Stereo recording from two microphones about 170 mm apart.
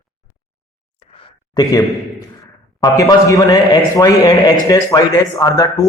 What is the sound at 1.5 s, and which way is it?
Speech, 20° left (ahead or behind).